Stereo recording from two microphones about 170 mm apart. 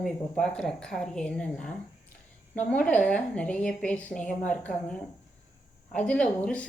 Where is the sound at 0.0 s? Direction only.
5° left (ahead or behind).